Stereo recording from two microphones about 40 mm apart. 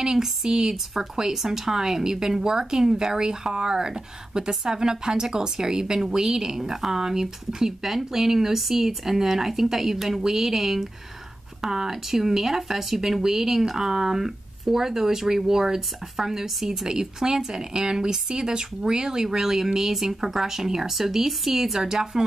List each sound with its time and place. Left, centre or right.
0.0 s speech: centre